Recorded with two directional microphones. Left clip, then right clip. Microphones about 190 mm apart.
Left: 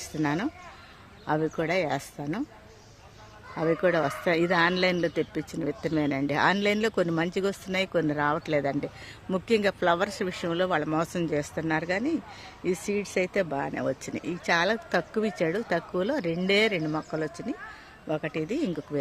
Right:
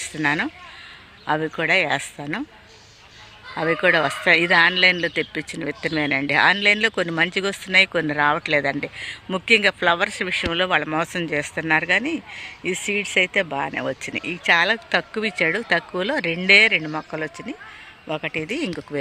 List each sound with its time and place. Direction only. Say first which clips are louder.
0.0 s speech: right 7 dB; centre (ahead or behind)
3.5 s speech: right 6 dB; 10° right (ahead or behind)